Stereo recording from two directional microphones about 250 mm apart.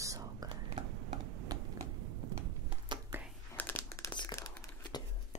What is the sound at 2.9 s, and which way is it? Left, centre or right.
Whispering, centre.